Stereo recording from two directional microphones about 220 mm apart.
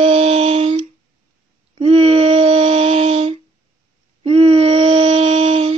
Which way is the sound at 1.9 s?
25° right (ahead or behind).